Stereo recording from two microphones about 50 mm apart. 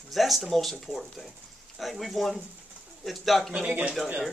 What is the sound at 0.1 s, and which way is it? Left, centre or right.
Speech, centre.